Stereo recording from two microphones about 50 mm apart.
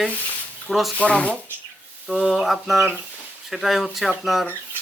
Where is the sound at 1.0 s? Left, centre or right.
Left.